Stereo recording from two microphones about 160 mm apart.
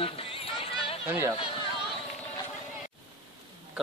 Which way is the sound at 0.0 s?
35° left (ahead or behind).